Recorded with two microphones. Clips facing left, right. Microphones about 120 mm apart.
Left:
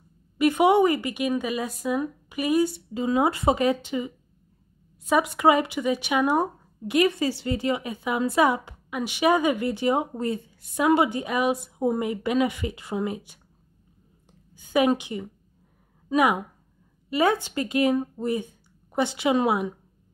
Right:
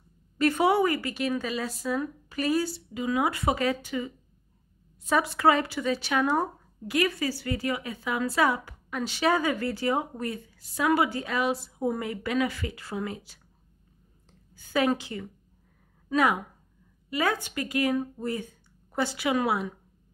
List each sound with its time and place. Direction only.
0.4 s a woman's voice: 15° left (ahead or behind)
2.9 s speech: 30° left (ahead or behind)
5.1 s speech: 15° left (ahead or behind)
14.5 s a woman's voice: 15° left (ahead or behind)